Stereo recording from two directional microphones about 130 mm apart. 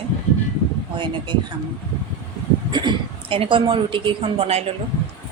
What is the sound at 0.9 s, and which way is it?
Speech, 35° right (ahead or behind).